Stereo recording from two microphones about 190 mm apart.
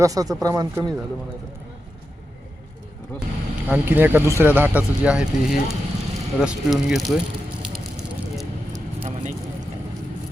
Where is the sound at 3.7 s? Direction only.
10° right (ahead or behind).